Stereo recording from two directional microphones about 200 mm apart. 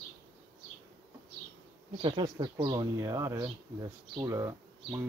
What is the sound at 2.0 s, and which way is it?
Speech, 20° right (ahead or behind).